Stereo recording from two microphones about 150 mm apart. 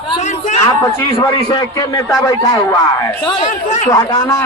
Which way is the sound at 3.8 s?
20° left (ahead or behind).